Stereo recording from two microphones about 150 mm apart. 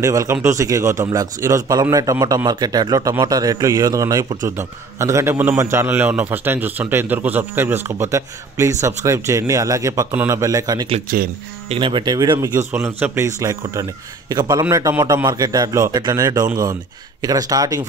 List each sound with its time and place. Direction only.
0.0 s a man's voice: 20° right (ahead or behind)
11.1 s speech: 70° right (ahead or behind)
11.7 s a man's voice: 35° right (ahead or behind)